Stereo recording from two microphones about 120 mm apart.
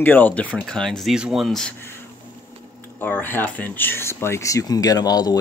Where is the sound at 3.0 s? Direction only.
15° left (ahead or behind).